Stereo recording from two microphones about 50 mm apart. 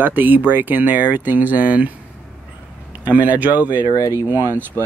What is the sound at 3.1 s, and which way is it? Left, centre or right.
Speech, right.